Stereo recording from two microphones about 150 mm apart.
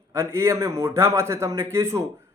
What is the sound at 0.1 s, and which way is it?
Speech, 20° right (ahead or behind).